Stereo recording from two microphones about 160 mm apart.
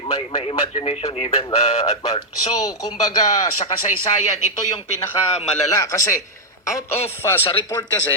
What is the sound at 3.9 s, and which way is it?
Speech, 50° left (ahead or behind).